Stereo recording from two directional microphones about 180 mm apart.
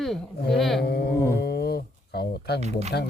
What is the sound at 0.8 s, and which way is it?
Speech, 65° left (ahead or behind).